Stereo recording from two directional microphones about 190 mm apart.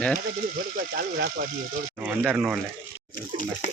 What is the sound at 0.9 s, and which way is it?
Speech, 55° right (ahead or behind).